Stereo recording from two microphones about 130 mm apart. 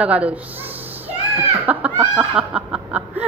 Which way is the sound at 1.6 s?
10° right (ahead or behind).